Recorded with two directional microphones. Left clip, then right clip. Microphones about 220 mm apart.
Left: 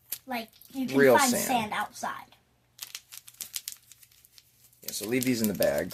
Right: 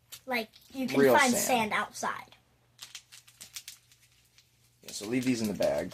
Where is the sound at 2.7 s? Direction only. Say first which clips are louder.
Left 4 dB; 40° left (ahead or behind).